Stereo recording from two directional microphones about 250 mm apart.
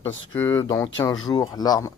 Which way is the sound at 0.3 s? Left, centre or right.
Centre.